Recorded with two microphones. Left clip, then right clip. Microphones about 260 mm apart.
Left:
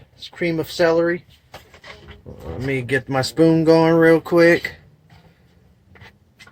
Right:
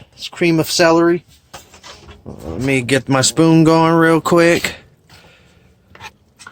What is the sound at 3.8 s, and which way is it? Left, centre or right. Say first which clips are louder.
Speech: right 2 dB; right.